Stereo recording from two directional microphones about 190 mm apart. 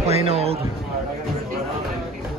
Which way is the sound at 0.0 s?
35° right (ahead or behind).